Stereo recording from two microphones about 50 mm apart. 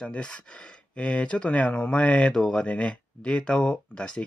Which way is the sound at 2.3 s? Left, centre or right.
Centre.